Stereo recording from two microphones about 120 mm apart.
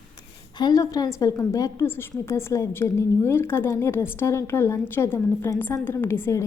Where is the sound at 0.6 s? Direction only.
30° left (ahead or behind).